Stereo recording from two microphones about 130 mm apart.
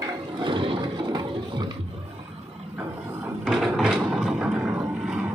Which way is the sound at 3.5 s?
Centre (ahead or behind).